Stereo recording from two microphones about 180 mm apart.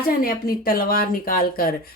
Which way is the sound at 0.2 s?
55° left (ahead or behind).